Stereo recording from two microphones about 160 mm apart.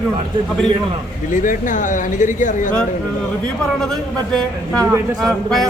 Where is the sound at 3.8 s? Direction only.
5° left (ahead or behind).